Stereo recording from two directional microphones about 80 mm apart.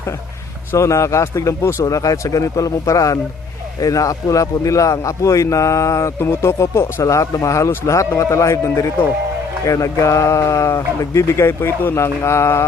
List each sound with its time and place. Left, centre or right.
0.7 s a man's voice: left